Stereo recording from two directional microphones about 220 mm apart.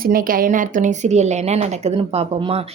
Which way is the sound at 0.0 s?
40° right (ahead or behind).